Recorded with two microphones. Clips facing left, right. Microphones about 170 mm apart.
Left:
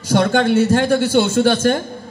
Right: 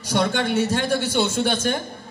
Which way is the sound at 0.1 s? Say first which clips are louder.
Left 7 dB; 50° left (ahead or behind).